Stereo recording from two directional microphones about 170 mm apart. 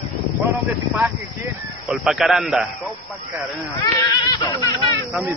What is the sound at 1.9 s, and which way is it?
Speech, centre (ahead or behind).